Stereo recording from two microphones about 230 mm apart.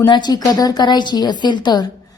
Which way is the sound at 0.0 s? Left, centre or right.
Centre.